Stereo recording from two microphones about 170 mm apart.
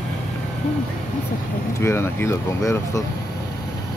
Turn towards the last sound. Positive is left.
turn(degrees=15)  # may be behind; listen again after turning